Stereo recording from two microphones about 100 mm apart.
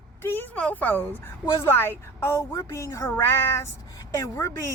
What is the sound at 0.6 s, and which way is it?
A woman's voice, 15° left (ahead or behind).